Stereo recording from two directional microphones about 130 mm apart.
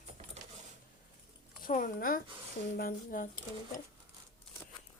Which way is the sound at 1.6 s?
90° left.